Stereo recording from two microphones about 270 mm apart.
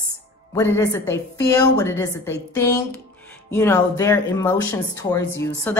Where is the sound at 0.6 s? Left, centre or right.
Centre.